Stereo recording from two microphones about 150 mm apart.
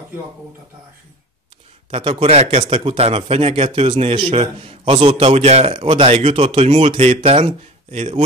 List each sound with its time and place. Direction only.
1.9 s speech: 35° right (ahead or behind)